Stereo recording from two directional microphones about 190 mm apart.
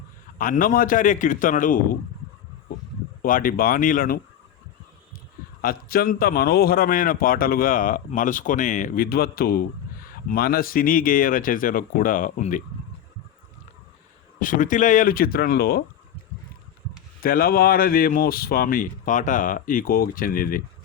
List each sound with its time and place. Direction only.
0.3 s a man's voice: 45° left (ahead or behind)
3.2 s a man's voice: 45° left (ahead or behind)
5.6 s a man's voice: 50° left (ahead or behind)
14.3 s a man's voice: 45° left (ahead or behind)
17.2 s a man's voice: 50° left (ahead or behind)